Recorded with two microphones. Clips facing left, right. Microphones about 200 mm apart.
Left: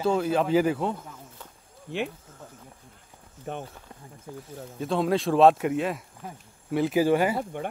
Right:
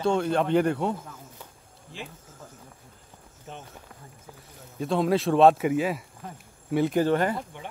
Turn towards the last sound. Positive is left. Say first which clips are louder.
# left 1 dB
turn(degrees=10)  # may be behind; listen again after turning